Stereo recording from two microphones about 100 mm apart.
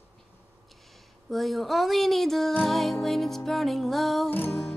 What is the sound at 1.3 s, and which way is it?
Music, centre (ahead or behind).